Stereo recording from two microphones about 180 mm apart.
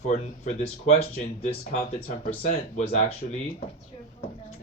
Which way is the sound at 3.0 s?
35° left (ahead or behind).